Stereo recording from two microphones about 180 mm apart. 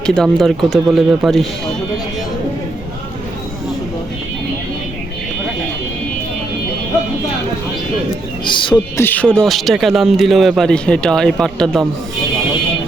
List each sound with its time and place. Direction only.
0.0 s a man's voice: 5° left (ahead or behind)
8.4 s speech: 25° left (ahead or behind)
9.0 s a man's voice: 10° left (ahead or behind)